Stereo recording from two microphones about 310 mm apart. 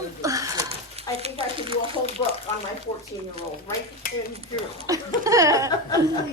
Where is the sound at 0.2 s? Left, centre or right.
Centre.